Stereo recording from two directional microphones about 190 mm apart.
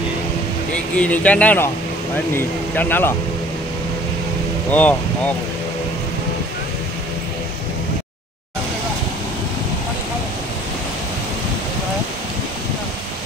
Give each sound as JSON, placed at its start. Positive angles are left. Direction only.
{"t": 0.9, "sound": "speech", "side_deg": 5}
{"t": 4.6, "sound": "speech", "side_deg": 10}